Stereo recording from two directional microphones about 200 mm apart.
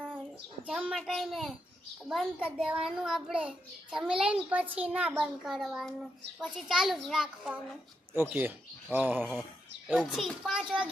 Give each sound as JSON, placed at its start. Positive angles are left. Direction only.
{"t": 0.7, "sound": "a child's voice", "side_deg": -5}
{"t": 9.2, "sound": "a child's voice", "side_deg": 5}